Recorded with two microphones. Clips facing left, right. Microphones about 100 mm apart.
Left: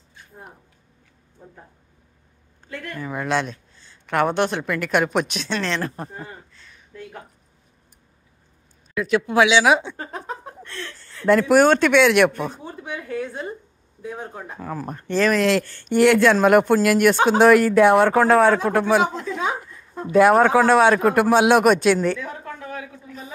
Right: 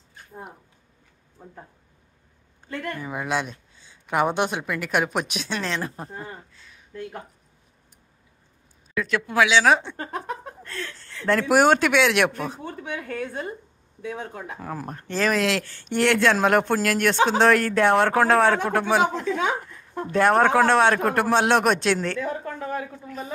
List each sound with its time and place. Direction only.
3.0 s speech: 10° right (ahead or behind)
8.9 s speech: 15° left (ahead or behind)
10.1 s speech: 65° right (ahead or behind)
11.2 s speech: centre (ahead or behind)
12.6 s a woman's voice: 60° right (ahead or behind)
14.0 s speech: 90° right
14.6 s speech: 5° right (ahead or behind)
19.0 s a sound: 65° right (ahead or behind)
20.1 s speech: 5° left (ahead or behind)
22.2 s a woman's voice: 40° right (ahead or behind)